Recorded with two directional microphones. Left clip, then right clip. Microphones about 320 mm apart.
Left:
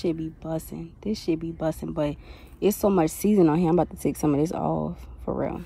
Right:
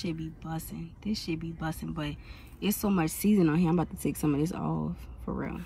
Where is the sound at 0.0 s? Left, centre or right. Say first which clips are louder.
Left 9 dB; left.